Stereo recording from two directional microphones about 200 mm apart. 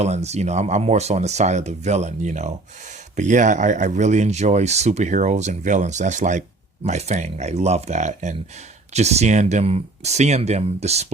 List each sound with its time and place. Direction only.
0.0 s speech: 35° right (ahead or behind)